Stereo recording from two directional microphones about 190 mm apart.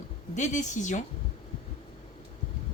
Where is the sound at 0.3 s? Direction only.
40° left (ahead or behind).